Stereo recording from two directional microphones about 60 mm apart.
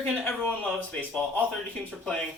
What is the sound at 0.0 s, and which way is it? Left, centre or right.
Speech, centre.